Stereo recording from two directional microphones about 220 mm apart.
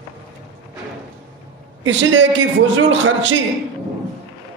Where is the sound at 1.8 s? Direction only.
60° right (ahead or behind).